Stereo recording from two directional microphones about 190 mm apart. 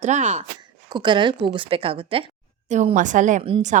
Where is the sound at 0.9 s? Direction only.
25° right (ahead or behind).